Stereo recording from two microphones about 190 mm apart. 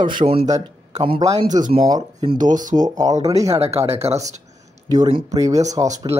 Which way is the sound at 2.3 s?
45° right (ahead or behind).